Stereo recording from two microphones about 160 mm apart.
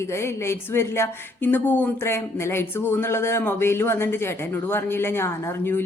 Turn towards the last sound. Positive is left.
turn(degrees=15)  # may be behind; listen again after turning